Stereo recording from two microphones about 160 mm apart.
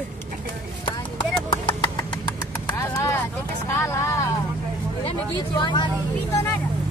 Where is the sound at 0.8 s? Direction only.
30° left (ahead or behind).